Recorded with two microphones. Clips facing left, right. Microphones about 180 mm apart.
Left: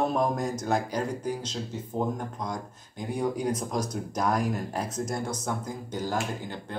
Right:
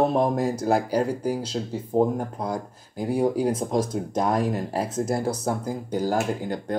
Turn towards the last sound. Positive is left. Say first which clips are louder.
# right 7 dB
turn(degrees=-40)  # may be behind; listen again after turning